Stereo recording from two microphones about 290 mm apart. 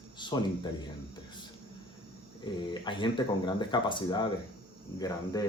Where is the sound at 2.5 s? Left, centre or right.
Centre.